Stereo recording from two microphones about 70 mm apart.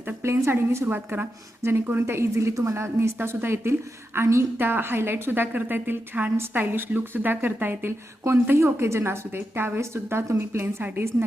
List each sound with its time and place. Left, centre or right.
0.0 s a woman's voice: right
0.9 s a woman's voice: right
8.4 s a woman's voice: right